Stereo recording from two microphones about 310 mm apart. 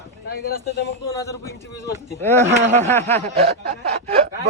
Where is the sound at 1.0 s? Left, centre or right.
Centre.